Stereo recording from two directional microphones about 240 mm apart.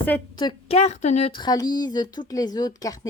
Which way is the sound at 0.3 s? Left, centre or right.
Left.